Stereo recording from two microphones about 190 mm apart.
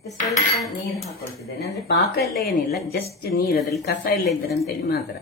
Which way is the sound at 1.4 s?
60° left (ahead or behind).